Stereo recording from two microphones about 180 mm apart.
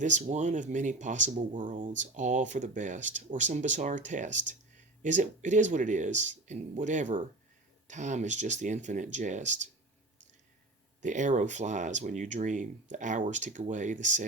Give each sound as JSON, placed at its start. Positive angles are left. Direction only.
{"t": 0.0, "sound": "speech", "side_deg": -40}
{"t": 11.0, "sound": "speech", "side_deg": -45}